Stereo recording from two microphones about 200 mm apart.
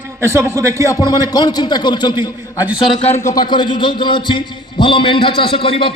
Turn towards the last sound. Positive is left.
turn(degrees=25)  # may be behind; listen again after turning